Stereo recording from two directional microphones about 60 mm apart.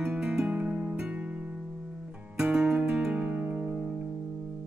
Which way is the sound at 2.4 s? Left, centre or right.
Centre.